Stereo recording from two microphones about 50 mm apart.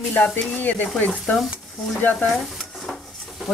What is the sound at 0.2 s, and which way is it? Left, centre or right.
Speech, centre.